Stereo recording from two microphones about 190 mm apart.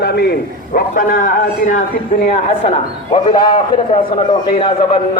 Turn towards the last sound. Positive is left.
turn(degrees=30)  # may be behind; listen again after turning